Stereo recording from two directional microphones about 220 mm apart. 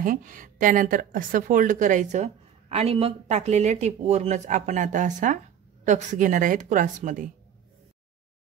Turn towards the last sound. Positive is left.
turn(degrees=-35)  # may be behind; listen again after turning